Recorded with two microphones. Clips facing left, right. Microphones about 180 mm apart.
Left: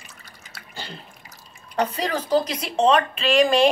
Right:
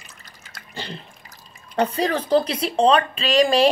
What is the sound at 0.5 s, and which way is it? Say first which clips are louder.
Drip: right 3 dB; 5° left (ahead or behind).